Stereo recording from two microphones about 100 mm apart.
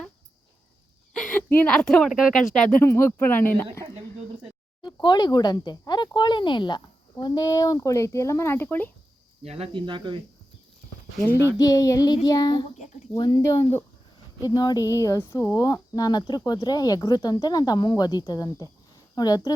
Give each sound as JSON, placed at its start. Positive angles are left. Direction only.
{"t": 1.1, "sound": "a sound", "side_deg": 5}
{"t": 1.4, "sound": "a sound", "side_deg": 15}
{"t": 1.7, "sound": "speech", "side_deg": 5}
{"t": 2.6, "sound": "speech", "side_deg": 25}
{"t": 5.0, "sound": "speech", "side_deg": 45}
{"t": 9.4, "sound": "cricket", "side_deg": -90}
{"t": 9.7, "sound": "speech", "side_deg": -55}
{"t": 11.5, "sound": "speech", "side_deg": 35}
{"t": 14.4, "sound": "speech", "side_deg": 40}